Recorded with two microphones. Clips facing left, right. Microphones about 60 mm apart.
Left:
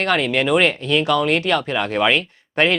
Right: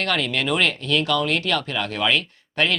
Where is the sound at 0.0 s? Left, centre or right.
Left.